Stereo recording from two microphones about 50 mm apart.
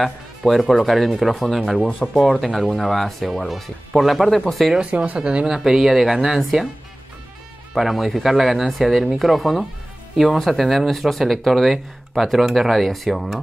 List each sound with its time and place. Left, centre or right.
0.0 s speech: centre
4.9 s speech: right
5.2 s speech: centre
5.6 s speech: centre
7.7 s speech: centre